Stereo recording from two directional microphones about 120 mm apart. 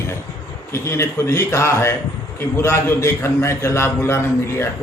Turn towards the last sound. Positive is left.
turn(degrees=20)  # may be behind; listen again after turning